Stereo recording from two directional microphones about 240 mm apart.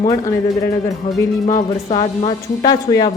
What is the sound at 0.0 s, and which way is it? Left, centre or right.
Speech, centre.